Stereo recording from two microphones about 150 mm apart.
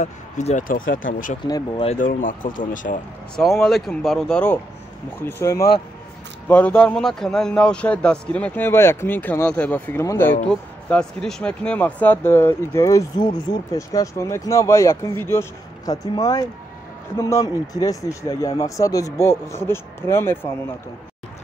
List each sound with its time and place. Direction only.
0.0 s speech: 50° left (ahead or behind)
0.7 s speech: 65° left (ahead or behind)
1.4 s speech: 30° left (ahead or behind)
1.9 s speech: 55° left (ahead or behind)
3.3 s speech: centre (ahead or behind)
5.2 s speech: 20° left (ahead or behind)
10.5 s speech: 5° left (ahead or behind)